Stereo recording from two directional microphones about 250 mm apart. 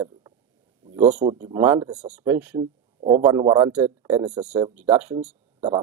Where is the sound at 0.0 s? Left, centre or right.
Centre.